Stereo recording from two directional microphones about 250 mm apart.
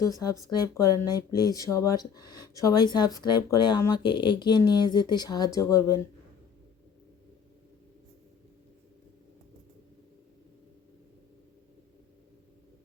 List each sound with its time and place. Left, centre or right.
0.5 s speech: centre